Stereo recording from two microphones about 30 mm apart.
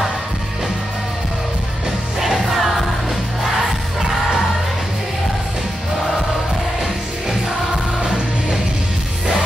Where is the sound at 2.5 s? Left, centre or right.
Centre.